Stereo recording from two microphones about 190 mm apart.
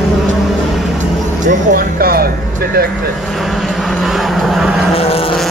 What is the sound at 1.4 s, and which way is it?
Music, 45° right (ahead or behind).